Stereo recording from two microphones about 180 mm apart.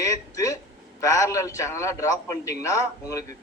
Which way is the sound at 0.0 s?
20° left (ahead or behind).